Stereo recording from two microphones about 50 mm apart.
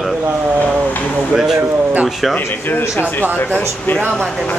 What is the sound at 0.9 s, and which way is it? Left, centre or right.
Speech, left.